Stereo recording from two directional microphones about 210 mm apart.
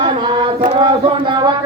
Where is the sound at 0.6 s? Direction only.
25° right (ahead or behind).